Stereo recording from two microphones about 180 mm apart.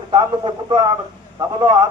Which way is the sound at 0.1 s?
25° right (ahead or behind).